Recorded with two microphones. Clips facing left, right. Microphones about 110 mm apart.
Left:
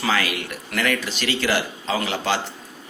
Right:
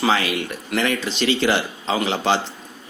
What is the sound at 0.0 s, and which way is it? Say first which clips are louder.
Speech: right 3 dB; 25° right (ahead or behind).